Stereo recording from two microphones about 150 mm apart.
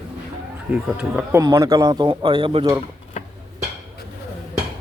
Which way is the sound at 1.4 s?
20° right (ahead or behind).